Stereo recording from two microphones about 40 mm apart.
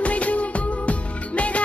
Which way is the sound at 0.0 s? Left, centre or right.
Left.